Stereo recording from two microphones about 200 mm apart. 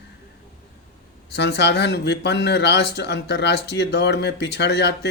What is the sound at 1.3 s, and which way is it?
Speech, 60° left (ahead or behind).